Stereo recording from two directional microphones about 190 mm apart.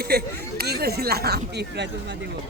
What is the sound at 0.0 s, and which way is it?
Speech, 55° right (ahead or behind).